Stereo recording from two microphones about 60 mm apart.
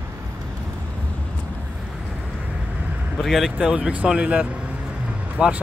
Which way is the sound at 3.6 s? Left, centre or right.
Centre.